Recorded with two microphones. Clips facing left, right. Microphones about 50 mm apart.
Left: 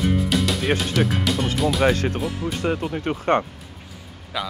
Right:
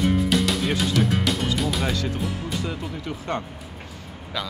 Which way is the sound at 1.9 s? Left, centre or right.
Left.